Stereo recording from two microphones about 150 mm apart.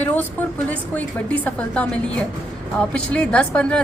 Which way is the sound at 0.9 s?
10° left (ahead or behind).